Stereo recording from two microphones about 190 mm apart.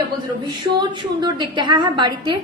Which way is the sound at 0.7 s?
25° right (ahead or behind).